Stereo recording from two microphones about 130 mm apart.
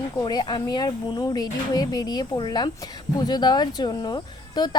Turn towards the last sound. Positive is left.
turn(degrees=35)  # may be behind; listen again after turning